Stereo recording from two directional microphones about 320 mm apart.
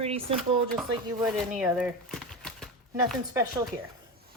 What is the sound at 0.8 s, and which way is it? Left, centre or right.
Speech, centre.